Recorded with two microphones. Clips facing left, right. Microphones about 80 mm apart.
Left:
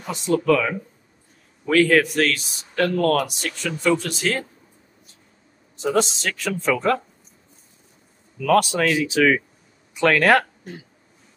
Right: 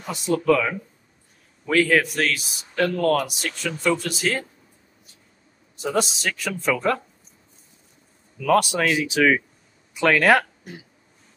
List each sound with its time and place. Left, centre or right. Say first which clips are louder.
0.0 s speech: left 1 dB; centre
5.8 s speech: left 3 dB; centre
8.4 s speech: left 1 dB; centre
9.9 s speech: left 1 dB; centre